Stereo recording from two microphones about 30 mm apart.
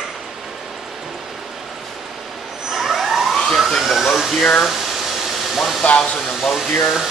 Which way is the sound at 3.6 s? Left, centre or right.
Centre.